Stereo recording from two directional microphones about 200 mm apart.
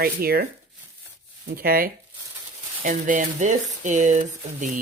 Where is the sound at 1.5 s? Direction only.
50° right (ahead or behind).